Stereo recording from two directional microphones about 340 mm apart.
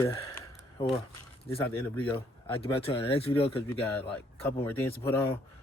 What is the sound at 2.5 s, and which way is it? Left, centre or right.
Speech, centre.